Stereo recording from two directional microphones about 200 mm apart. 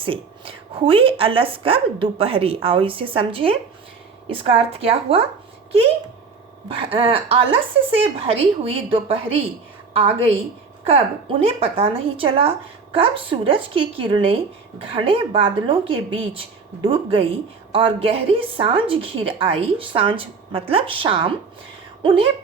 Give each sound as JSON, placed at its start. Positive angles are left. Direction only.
{"t": 0.0, "sound": "speech", "side_deg": -25}
{"t": 6.7, "sound": "speech", "side_deg": -30}